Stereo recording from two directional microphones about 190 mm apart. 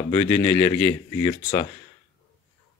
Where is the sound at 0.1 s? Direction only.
15° left (ahead or behind).